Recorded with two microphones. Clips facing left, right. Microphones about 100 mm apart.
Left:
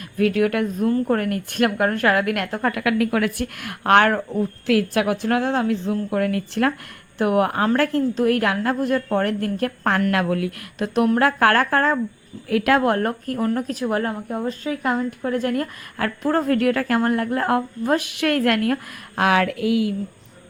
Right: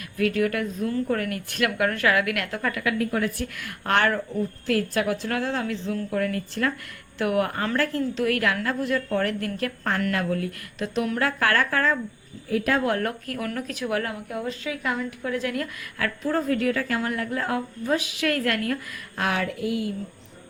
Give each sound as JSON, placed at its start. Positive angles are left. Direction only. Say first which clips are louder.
{"t": 0.3, "sound": "a woman's voice", "louder": "left 4 dB", "side_deg": 55}
{"t": 2.7, "sound": "a woman's voice", "louder": "left 5 dB", "side_deg": 65}
{"t": 4.6, "sound": "a woman's voice", "louder": "left 5 dB", "side_deg": 65}
{"t": 10.1, "sound": "a woman's voice", "louder": "left 5 dB", "side_deg": 65}
{"t": 12.5, "sound": "speech", "louder": "left 5 dB", "side_deg": 75}
{"t": 13.0, "sound": "a woman's voice", "louder": "left 6 dB", "side_deg": 40}
{"t": 16.2, "sound": "a woman's voice", "louder": "left 5 dB", "side_deg": 60}